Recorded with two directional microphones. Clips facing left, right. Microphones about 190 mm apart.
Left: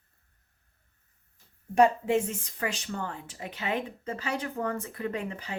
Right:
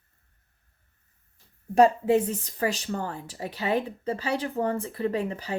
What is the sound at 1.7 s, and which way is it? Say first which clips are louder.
Speech: right 3 dB; 35° right (ahead or behind).